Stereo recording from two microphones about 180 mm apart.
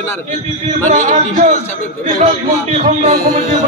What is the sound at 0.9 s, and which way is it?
Speech, 45° right (ahead or behind).